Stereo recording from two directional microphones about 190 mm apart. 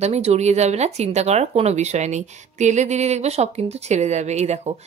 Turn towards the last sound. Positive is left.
turn(degrees=-35)  # may be behind; listen again after turning